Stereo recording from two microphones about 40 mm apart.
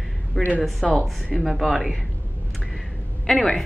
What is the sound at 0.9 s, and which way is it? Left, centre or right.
Speech, right.